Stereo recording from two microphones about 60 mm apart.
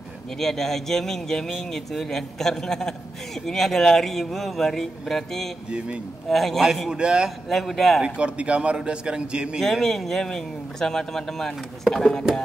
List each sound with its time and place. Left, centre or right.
0.4 s speech: centre
7.0 s a man's voice: centre
7.4 s speech: centre
8.0 s a man's voice: centre
9.6 s a man's voice: centre